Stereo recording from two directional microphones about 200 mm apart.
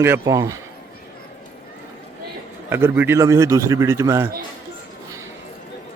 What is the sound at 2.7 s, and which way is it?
A man's voice, 10° right (ahead or behind).